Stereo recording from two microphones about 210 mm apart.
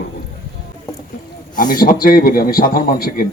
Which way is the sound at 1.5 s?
40° left (ahead or behind).